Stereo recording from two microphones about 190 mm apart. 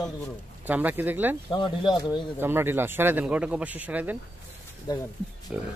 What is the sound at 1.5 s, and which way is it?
Speech, 25° left (ahead or behind).